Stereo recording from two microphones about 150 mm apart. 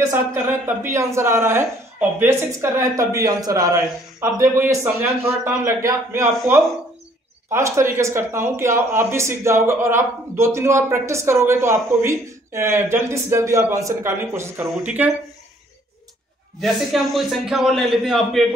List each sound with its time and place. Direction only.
0.1 s speech: 15° right (ahead or behind)
7.4 s speech: 20° right (ahead or behind)
16.5 s a man's voice: centre (ahead or behind)